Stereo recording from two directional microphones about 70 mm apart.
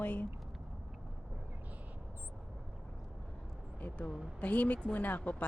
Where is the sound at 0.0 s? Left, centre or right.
Left.